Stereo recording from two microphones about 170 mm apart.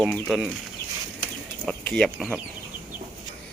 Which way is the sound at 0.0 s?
Centre (ahead or behind).